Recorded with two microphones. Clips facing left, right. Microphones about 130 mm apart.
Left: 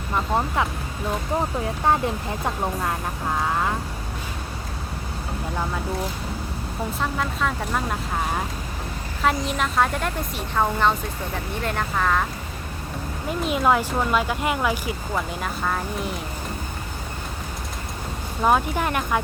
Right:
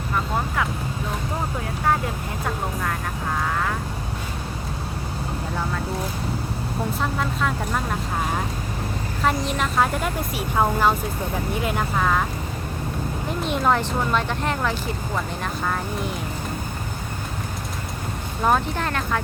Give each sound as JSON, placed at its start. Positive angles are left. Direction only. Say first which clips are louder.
{"t": 7.0, "sound": "speech", "louder": "left 1 dB", "side_deg": 0}
{"t": 9.2, "sound": "speech", "louder": "even", "side_deg": 0}
{"t": 13.4, "sound": "speech", "louder": "left 1 dB", "side_deg": 5}
{"t": 18.4, "sound": "speech", "louder": "left 1 dB", "side_deg": 10}